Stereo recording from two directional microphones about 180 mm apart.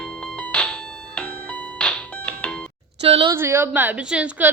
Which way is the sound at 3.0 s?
35° right (ahead or behind).